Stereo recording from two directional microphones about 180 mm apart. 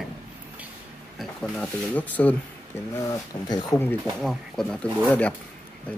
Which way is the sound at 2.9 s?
20° left (ahead or behind).